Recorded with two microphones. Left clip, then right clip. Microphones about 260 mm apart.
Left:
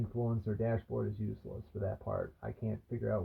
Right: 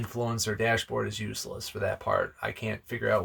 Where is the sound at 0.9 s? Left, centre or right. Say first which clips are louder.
Right 8 dB; right.